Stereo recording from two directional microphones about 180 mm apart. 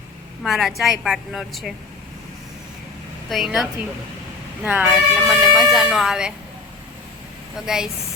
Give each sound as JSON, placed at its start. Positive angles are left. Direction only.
{"t": 0.4, "sound": "a woman's voice", "side_deg": 0}
{"t": 3.2, "sound": "a woman's voice", "side_deg": 0}